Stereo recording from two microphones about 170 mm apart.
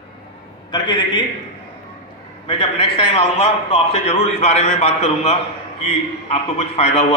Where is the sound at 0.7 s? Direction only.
25° left (ahead or behind).